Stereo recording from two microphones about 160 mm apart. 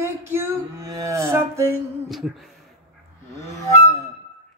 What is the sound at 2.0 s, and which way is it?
Speech, centre (ahead or behind).